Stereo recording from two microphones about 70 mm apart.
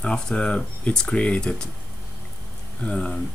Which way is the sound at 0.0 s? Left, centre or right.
Centre.